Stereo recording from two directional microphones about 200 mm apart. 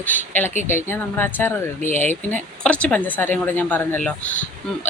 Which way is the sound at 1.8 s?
40° left (ahead or behind).